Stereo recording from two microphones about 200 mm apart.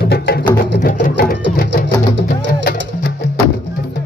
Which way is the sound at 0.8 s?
45° left (ahead or behind).